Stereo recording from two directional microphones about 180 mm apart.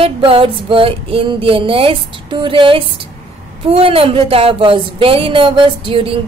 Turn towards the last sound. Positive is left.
turn(degrees=-30)  # may be behind; listen again after turning